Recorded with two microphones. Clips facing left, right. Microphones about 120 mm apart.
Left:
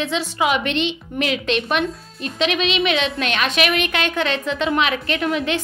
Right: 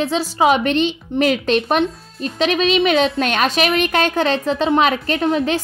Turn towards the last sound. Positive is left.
turn(degrees=-35)  # may be behind; listen again after turning